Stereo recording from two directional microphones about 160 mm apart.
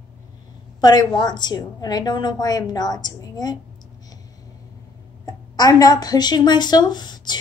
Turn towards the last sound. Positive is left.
turn(degrees=25)  # may be behind; listen again after turning